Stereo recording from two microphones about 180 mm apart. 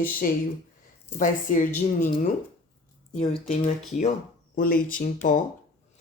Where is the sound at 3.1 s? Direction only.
35° left (ahead or behind); by 5.1 s 50° left (ahead or behind).